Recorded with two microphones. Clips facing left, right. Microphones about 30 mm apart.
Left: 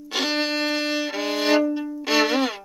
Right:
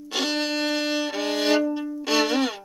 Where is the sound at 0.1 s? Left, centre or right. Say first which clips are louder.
Left 2 dB; centre.